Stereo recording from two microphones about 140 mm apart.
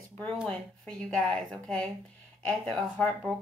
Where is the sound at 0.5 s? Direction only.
5° left (ahead or behind).